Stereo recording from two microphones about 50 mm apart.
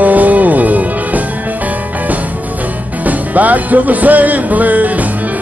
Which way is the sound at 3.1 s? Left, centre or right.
Right.